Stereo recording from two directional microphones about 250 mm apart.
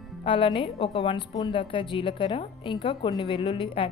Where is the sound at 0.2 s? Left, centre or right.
Centre.